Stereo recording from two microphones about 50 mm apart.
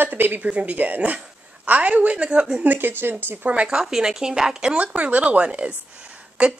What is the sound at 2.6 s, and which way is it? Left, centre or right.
Speech, right.